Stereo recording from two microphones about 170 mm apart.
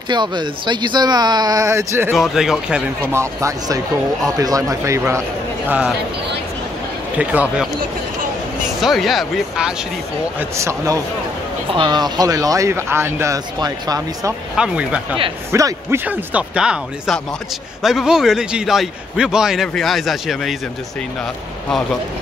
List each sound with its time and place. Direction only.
0.1 s speech: 25° right (ahead or behind)
2.1 s speech: centre (ahead or behind); by 5.2 s 15° right (ahead or behind)
5.7 s speech: 5° right (ahead or behind)
7.2 s speech: 10° right (ahead or behind)
10.5 s speech: 15° right (ahead or behind)
14.6 s a man's voice: 5° right (ahead or behind)